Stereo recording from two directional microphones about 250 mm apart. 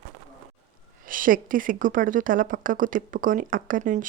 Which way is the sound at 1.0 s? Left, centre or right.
Right.